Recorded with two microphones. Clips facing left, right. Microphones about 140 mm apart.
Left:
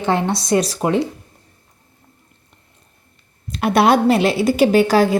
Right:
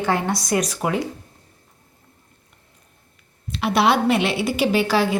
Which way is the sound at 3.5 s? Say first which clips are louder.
Left 4 dB; 50° left (ahead or behind).